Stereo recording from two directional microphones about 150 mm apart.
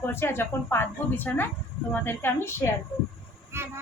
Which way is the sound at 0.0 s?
15° left (ahead or behind).